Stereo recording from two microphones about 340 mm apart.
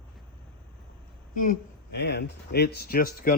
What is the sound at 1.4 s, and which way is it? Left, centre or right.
A man's voice, left.